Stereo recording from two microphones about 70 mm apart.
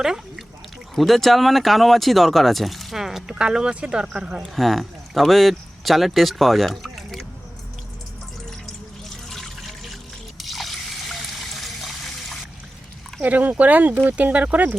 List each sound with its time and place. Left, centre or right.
0.0 s speech: centre
4.5 s speech: centre
9.3 s trickle: centre
13.2 s speech: right